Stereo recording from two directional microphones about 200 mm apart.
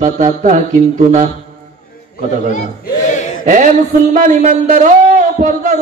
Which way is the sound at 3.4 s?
40° right (ahead or behind).